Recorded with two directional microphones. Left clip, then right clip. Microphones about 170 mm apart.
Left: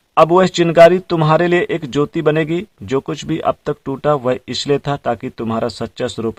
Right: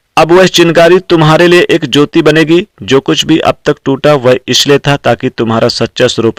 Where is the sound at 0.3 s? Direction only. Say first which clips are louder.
Right 8 dB; 25° right (ahead or behind).